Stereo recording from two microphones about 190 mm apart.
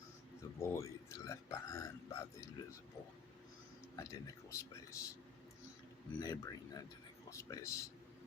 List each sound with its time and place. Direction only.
0.6 s speech: 15° left (ahead or behind)
3.9 s speech: 15° left (ahead or behind)
6.1 s speech: 20° left (ahead or behind)